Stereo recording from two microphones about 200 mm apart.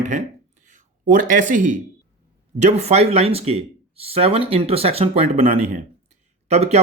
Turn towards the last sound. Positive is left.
turn(degrees=-35)  # may be behind; listen again after turning